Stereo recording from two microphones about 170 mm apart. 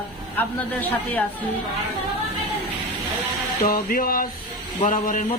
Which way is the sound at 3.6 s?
60° left (ahead or behind).